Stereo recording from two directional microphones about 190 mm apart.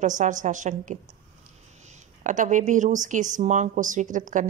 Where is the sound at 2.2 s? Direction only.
40° right (ahead or behind).